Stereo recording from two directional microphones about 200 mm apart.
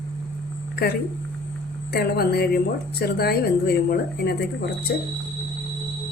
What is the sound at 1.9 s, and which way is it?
Speech, 50° left (ahead or behind).